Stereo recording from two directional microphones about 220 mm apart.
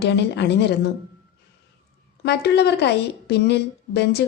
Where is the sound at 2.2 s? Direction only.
50° left (ahead or behind).